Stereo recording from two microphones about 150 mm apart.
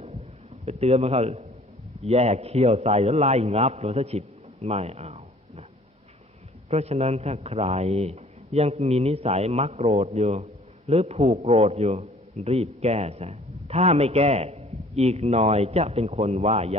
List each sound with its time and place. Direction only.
0.7 s a man's voice: 45° right (ahead or behind)
6.7 s a man's voice: 45° right (ahead or behind)